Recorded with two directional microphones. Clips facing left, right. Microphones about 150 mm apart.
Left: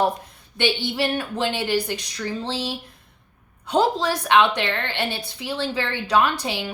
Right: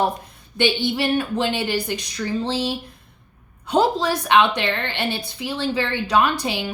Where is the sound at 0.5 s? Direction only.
15° right (ahead or behind).